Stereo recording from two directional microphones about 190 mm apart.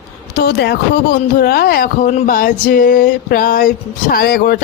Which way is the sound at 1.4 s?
50° left (ahead or behind).